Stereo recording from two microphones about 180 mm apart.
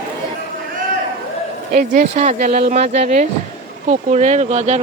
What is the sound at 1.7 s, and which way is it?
Speech, 45° right (ahead or behind).